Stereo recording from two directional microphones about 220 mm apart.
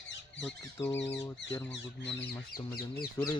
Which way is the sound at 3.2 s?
15° left (ahead or behind).